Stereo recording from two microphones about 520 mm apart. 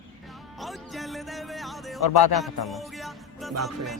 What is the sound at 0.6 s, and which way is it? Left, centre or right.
Music, centre.